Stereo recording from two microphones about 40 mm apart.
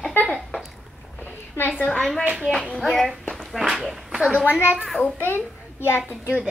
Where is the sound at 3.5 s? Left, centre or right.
Centre.